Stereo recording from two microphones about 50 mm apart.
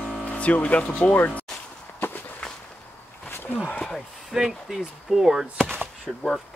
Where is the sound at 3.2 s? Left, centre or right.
Left.